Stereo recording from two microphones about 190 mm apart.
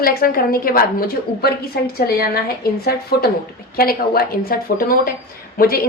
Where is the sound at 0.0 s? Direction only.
50° left (ahead or behind).